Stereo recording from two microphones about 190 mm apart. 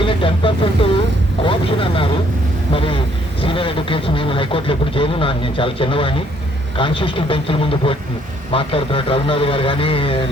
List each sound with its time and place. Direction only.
0.0 s vehicle: 25° left (ahead or behind)
3.4 s a sound: 25° left (ahead or behind)
6.7 s speech: 25° left (ahead or behind)